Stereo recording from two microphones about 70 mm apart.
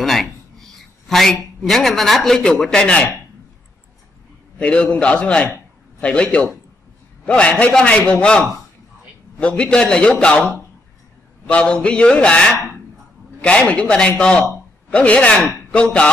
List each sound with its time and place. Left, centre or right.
0.0 s a sound: centre
2.6 s a man's voice: centre
4.6 s a man's voice: centre
7.2 s a man's voice: centre
11.5 s a man's voice: centre